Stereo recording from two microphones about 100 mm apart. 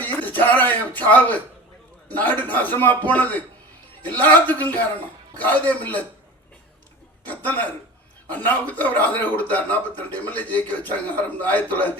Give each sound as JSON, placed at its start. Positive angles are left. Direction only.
{"t": 0.0, "sound": "a man's voice", "side_deg": 15}
{"t": 7.3, "sound": "a man's voice", "side_deg": 15}